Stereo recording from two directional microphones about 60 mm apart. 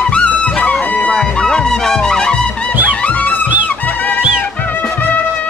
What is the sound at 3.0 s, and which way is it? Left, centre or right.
Music, left.